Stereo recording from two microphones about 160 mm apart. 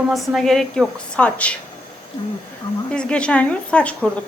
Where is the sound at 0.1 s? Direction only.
Centre (ahead or behind).